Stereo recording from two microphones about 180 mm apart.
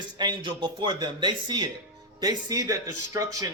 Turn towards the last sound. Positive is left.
turn(degrees=-20)  # may be behind; listen again after turning